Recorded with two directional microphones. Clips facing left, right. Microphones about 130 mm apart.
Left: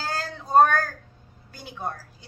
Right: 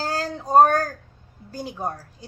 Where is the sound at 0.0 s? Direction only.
40° right (ahead or behind).